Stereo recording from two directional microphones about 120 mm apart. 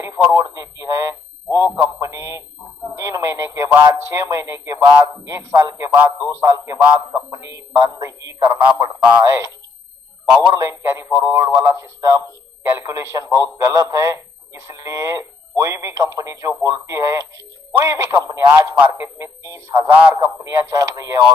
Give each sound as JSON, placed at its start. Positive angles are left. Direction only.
{"t": 0.0, "sound": "a man's voice", "side_deg": -20}
{"t": 10.5, "sound": "speech", "side_deg": -25}